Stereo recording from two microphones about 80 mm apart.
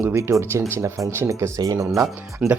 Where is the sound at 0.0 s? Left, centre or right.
Right.